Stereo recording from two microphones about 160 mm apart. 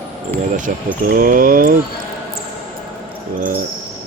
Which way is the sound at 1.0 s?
60° right (ahead or behind).